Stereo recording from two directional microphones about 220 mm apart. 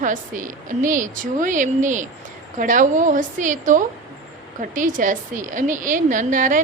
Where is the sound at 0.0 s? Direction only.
35° right (ahead or behind).